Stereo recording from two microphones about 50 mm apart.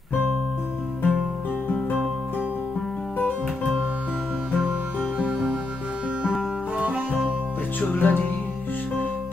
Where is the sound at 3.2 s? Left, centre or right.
Left.